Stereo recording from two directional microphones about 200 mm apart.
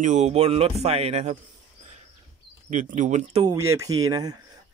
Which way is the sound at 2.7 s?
40° right (ahead or behind).